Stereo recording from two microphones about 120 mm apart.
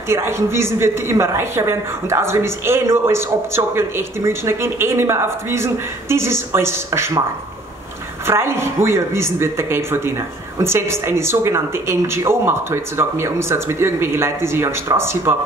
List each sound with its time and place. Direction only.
0.1 s a man's voice: 20° right (ahead or behind)
8.3 s a man's voice: 20° right (ahead or behind)